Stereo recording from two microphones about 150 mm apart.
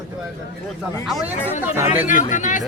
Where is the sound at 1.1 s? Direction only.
10° right (ahead or behind).